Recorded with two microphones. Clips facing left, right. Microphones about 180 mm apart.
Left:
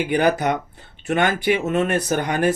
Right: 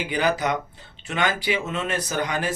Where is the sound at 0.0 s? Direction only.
55° left (ahead or behind).